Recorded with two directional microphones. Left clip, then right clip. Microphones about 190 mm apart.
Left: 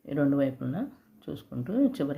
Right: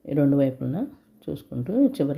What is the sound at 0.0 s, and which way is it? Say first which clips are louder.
Speech: right 5 dB; 30° right (ahead or behind).